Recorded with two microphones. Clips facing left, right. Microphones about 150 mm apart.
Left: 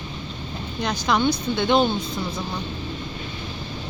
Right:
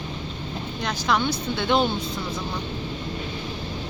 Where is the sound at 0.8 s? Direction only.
Centre (ahead or behind).